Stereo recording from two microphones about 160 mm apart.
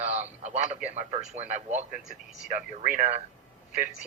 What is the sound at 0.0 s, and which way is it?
Radio, 45° right (ahead or behind).